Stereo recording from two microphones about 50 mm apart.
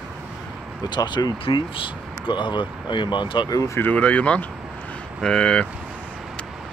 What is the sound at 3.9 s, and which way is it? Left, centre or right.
Speech, left.